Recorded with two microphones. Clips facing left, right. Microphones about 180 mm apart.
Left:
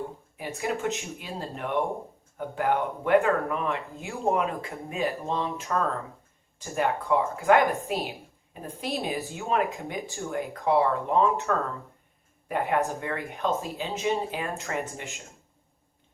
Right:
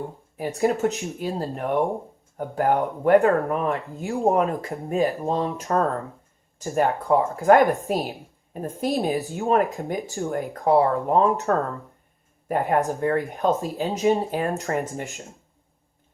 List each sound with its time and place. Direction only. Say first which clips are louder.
0.3 s a woman's voice: right 8 dB; 35° right (ahead or behind)